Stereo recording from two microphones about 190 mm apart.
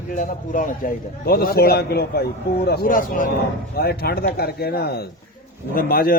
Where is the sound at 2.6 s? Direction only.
50° left (ahead or behind).